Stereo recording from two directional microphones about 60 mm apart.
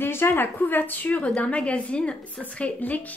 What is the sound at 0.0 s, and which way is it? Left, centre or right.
A woman's voice, left.